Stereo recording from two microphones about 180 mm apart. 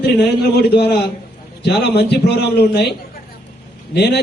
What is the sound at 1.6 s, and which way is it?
Speech, 65° left (ahead or behind).